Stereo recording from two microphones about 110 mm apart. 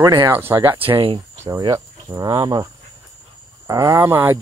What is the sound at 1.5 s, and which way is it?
Speech, 35° right (ahead or behind).